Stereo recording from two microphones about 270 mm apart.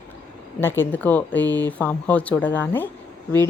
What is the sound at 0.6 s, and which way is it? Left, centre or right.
A woman's voice, centre.